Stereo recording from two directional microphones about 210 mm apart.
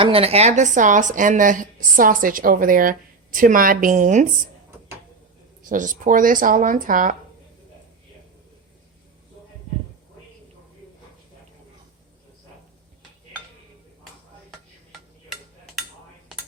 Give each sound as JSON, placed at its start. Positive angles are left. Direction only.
{"t": 0.0, "sound": "a woman's voice", "side_deg": -25}
{"t": 5.6, "sound": "a woman's voice", "side_deg": -35}